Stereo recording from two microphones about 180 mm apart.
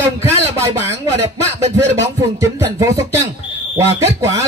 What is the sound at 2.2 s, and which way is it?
Speech, 15° right (ahead or behind).